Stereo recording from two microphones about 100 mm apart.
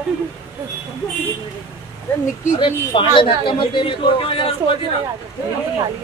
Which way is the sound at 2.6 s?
60° left (ahead or behind).